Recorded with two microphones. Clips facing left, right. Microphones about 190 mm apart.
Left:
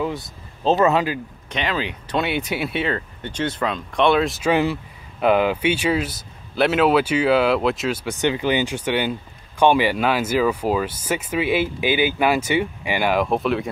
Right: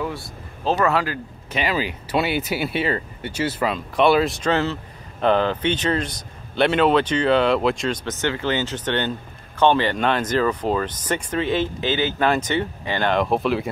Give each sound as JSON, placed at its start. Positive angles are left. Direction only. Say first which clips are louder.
{"t": 0.0, "sound": "speech", "louder": "left 3 dB", "side_deg": 20}
{"t": 1.5, "sound": "speech", "louder": "right 1 dB", "side_deg": -5}